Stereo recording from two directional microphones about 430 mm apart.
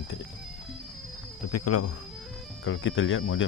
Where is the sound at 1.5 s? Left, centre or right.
Left.